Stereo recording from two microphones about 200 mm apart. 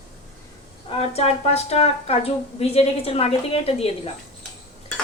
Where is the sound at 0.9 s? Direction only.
30° left (ahead or behind).